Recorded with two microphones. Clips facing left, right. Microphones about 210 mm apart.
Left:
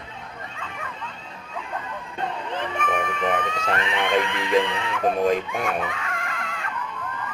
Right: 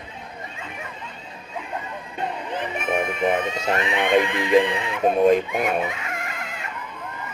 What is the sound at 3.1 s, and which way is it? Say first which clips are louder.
Speech: right 3 dB; 10° right (ahead or behind).